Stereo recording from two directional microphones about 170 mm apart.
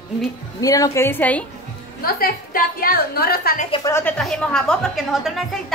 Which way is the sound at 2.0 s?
60° left (ahead or behind).